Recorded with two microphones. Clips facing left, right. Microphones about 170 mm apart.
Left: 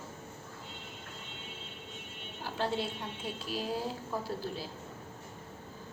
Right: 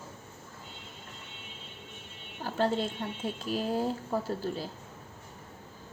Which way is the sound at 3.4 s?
45° right (ahead or behind).